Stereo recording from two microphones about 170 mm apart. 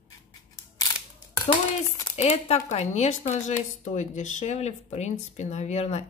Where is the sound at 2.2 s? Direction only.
40° left (ahead or behind).